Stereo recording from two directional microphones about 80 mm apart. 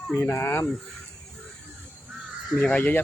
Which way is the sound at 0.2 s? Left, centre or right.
Left.